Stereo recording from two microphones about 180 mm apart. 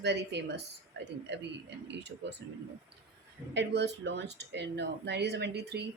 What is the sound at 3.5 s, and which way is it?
Speech, 75° right (ahead or behind).